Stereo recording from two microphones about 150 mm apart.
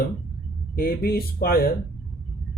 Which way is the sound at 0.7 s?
75° left (ahead or behind).